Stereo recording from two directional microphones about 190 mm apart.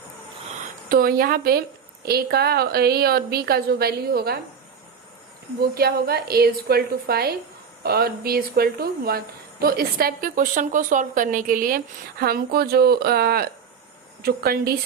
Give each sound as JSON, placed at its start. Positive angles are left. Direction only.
{"t": 0.9, "sound": "a woman's voice", "side_deg": -50}
{"t": 5.5, "sound": "a woman's voice", "side_deg": -55}